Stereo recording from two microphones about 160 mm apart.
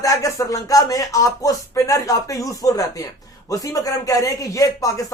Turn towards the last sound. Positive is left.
turn(degrees=20)  # may be behind; listen again after turning